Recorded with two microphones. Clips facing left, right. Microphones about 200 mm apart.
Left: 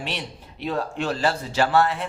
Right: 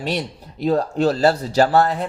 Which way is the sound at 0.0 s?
40° right (ahead or behind).